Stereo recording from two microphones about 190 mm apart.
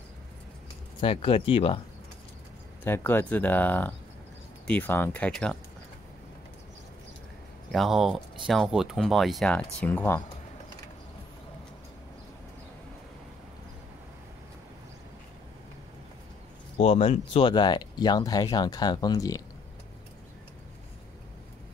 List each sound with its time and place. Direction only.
1.0 s speech: 30° left (ahead or behind)
2.8 s speech: 10° left (ahead or behind)
7.7 s speech: centre (ahead or behind)
16.7 s speech: 30° left (ahead or behind)